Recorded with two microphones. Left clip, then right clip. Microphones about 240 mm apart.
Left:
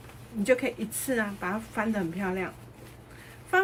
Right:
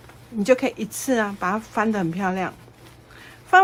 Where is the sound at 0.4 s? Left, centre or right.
Right.